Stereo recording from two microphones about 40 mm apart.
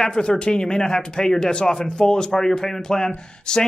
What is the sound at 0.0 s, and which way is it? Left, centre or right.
Speech, left.